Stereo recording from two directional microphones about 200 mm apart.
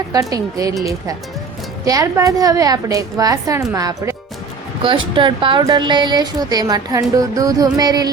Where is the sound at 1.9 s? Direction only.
15° right (ahead or behind).